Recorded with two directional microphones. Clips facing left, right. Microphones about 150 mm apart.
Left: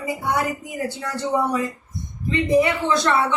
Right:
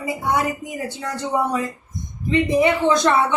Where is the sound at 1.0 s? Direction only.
20° right (ahead or behind).